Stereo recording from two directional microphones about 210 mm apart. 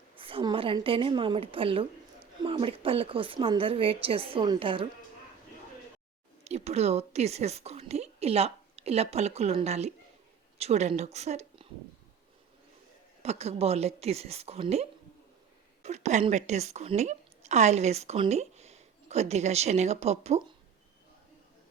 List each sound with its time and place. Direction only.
0.2 s a woman's voice: 25° right (ahead or behind)
6.4 s a woman's voice: 30° right (ahead or behind)
13.2 s a woman's voice: 30° right (ahead or behind)